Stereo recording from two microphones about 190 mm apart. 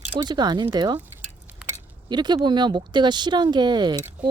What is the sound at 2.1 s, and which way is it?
Speech, 20° right (ahead or behind).